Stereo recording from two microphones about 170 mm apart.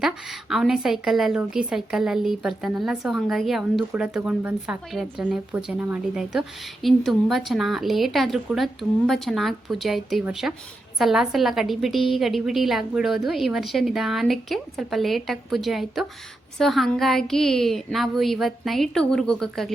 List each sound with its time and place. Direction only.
0.5 s a woman's voice: centre (ahead or behind)